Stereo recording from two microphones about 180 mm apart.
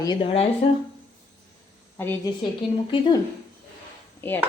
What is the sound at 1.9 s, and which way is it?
Speech, 10° left (ahead or behind).